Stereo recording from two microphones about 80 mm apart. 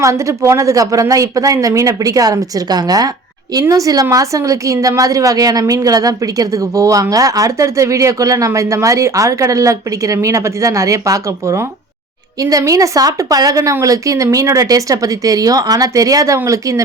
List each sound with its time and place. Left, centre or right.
0.0 s a woman's voice: right